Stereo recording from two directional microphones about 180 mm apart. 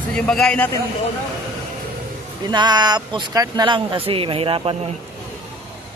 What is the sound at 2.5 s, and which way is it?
Speech, 25° right (ahead or behind).